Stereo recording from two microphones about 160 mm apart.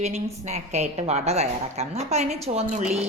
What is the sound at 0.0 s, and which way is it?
A woman's voice, 45° right (ahead or behind).